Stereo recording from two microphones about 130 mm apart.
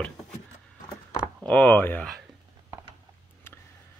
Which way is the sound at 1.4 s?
10° left (ahead or behind).